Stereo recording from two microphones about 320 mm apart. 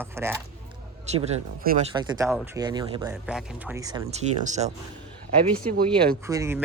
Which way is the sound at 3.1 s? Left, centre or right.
Centre.